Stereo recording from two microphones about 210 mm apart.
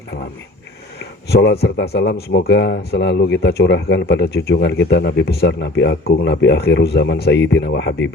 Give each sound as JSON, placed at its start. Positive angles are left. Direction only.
{"t": 0.9, "sound": "speech", "side_deg": 55}